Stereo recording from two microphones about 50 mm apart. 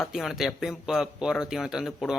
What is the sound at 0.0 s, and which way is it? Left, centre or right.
Speech, centre.